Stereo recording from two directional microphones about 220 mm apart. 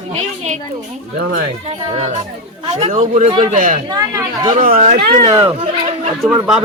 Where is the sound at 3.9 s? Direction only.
15° right (ahead or behind).